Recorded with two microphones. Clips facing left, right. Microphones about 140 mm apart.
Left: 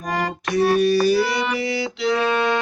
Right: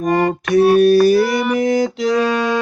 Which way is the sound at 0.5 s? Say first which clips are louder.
Right 6 dB; 55° right (ahead or behind).